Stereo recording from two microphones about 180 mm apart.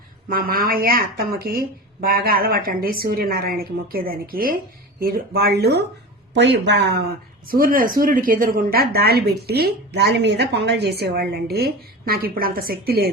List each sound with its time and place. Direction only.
0.3 s a woman's voice: 55° right (ahead or behind); by 7.0 s 70° right (ahead or behind)
7.4 s a woman's voice: 50° right (ahead or behind)